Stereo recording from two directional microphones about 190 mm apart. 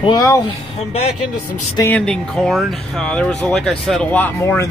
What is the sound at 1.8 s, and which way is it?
Speech, 5° left (ahead or behind).